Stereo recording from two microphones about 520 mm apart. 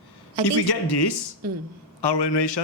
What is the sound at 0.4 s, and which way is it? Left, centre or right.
Speech, left.